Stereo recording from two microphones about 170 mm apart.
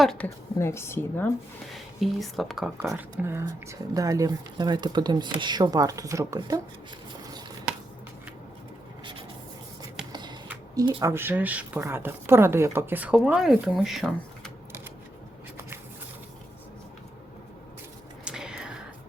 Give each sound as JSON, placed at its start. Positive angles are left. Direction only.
{"t": 0.0, "sound": "speech", "side_deg": 0}
{"t": 0.6, "sound": "a woman's voice", "side_deg": 15}
{"t": 1.7, "sound": "speech", "side_deg": 0}
{"t": 2.9, "sound": "speech", "side_deg": -15}
{"t": 10.1, "sound": "shuffling cards", "side_deg": -25}
{"t": 10.8, "sound": "a woman's voice", "side_deg": -20}
{"t": 18.3, "sound": "whispering", "side_deg": -5}